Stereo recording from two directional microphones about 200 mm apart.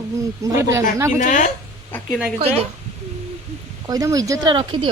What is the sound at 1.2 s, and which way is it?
Speech, 40° left (ahead or behind).